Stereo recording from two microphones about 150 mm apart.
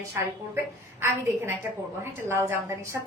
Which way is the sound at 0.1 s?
20° right (ahead or behind).